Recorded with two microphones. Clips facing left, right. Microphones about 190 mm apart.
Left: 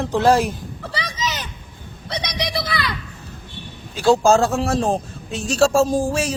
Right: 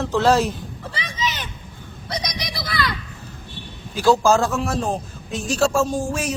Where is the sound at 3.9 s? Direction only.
30° left (ahead or behind).